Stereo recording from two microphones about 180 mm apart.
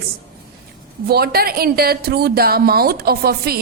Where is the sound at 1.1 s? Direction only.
60° right (ahead or behind).